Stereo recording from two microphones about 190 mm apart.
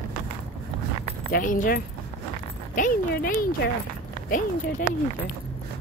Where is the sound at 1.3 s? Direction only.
45° left (ahead or behind).